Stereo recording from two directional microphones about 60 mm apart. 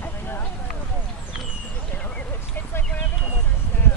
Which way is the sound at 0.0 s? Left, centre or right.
Left.